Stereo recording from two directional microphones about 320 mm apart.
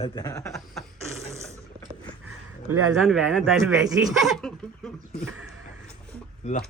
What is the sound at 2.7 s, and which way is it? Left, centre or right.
Speech, right.